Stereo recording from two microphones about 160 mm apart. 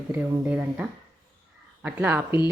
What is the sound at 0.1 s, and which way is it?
A woman's voice, 10° right (ahead or behind).